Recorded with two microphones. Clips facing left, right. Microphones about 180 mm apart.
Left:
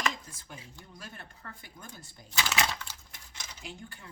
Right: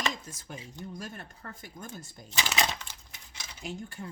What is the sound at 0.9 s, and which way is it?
Speech, 45° right (ahead or behind).